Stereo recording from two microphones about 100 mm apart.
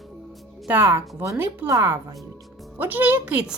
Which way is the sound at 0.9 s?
30° right (ahead or behind).